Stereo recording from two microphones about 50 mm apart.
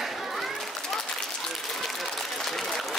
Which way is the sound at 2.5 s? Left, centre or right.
Centre.